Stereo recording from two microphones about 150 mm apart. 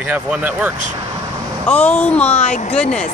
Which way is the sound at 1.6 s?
10° left (ahead or behind).